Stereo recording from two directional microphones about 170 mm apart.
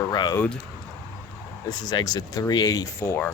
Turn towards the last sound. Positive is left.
turn(degrees=15)  # may be behind; listen again after turning